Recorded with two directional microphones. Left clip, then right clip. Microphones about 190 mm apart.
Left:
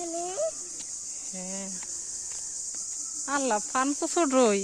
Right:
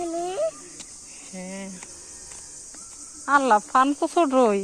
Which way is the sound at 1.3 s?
25° left (ahead or behind).